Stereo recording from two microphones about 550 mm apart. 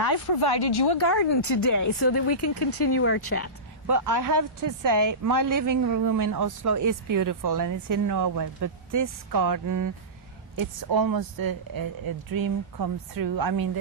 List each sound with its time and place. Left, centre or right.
0.0 s speech: left
3.8 s speech: right